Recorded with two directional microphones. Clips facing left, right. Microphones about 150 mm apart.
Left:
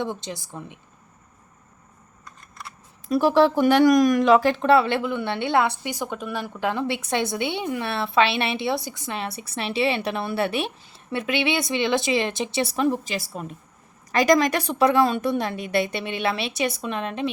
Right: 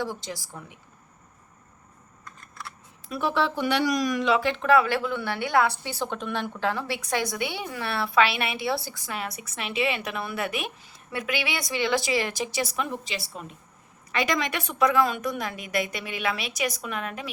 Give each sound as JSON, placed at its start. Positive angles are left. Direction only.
{"t": 0.0, "sound": "a woman's voice", "side_deg": 20}
{"t": 3.1, "sound": "speech", "side_deg": 35}
{"t": 4.6, "sound": "a woman's voice", "side_deg": 30}
{"t": 13.1, "sound": "a woman's voice", "side_deg": 45}